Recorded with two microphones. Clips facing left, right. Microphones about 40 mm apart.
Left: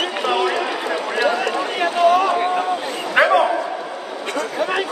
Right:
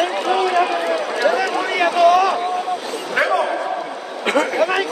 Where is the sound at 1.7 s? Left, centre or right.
Right.